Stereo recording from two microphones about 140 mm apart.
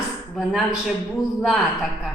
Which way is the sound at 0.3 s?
Centre (ahead or behind).